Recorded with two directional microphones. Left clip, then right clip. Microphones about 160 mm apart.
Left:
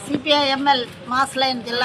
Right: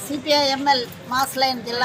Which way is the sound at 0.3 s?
30° left (ahead or behind).